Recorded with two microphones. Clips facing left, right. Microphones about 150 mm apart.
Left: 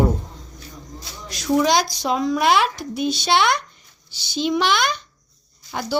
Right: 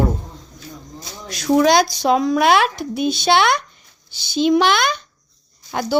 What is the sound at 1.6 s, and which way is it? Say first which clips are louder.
Speech: right 5 dB; 65° right (ahead or behind).